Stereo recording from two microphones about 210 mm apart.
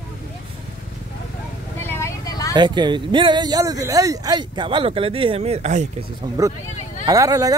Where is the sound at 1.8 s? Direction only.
10° left (ahead or behind).